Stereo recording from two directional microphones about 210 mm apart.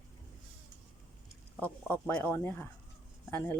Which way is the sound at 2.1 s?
5° left (ahead or behind).